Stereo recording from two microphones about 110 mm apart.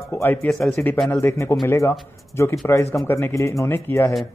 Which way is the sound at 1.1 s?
25° left (ahead or behind).